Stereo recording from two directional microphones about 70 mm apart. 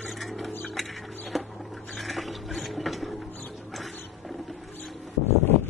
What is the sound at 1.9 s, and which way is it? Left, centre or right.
Ratchet, centre.